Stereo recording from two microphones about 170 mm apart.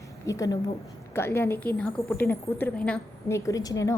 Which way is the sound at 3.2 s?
15° left (ahead or behind).